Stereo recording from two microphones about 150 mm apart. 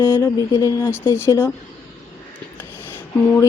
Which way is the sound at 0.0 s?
25° left (ahead or behind).